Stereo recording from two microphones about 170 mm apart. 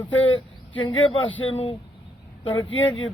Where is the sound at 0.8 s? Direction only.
30° left (ahead or behind).